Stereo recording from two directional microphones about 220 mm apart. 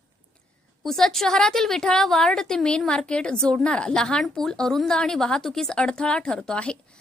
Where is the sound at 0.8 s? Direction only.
Centre (ahead or behind).